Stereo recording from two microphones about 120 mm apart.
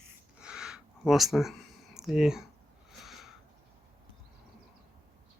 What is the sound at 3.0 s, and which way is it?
Sniff, centre (ahead or behind).